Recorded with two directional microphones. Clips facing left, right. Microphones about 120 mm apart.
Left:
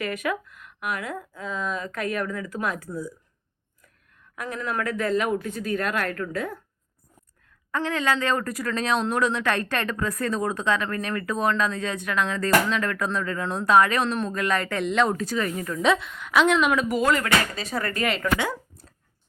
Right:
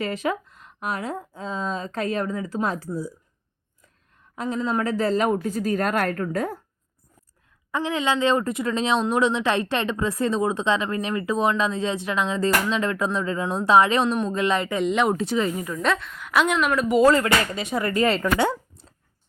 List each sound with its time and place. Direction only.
0.0 s speech: 30° right (ahead or behind)
4.4 s speech: 25° right (ahead or behind); by 6.6 s 40° right (ahead or behind)
7.7 s speech: 20° right (ahead or behind)
15.7 s a woman's voice: centre (ahead or behind)
16.9 s speech: 30° right (ahead or behind)
17.6 s speech: 15° right (ahead or behind)
18.3 s a sound: 30° right (ahead or behind)